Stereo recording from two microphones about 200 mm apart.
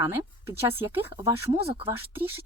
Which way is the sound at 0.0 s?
10° right (ahead or behind).